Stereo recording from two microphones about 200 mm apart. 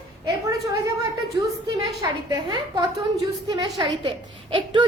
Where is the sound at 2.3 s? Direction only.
20° right (ahead or behind).